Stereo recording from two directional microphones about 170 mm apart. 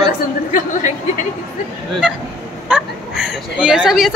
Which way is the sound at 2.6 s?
5° right (ahead or behind).